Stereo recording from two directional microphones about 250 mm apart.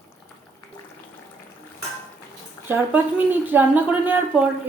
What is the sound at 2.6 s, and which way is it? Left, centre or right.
A woman's voice, centre.